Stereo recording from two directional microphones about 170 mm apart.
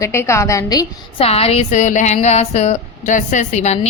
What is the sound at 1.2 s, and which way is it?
A woman's voice, 35° left (ahead or behind).